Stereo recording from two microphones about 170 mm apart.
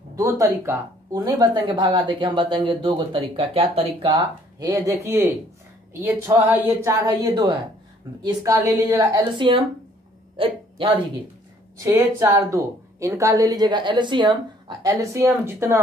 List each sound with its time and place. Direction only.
0.1 s speech: 20° right (ahead or behind); by 4.1 s 35° right (ahead or behind)
4.1 s speech: 20° right (ahead or behind)
10.3 s a sound: 30° right (ahead or behind)
11.8 s speech: 15° right (ahead or behind)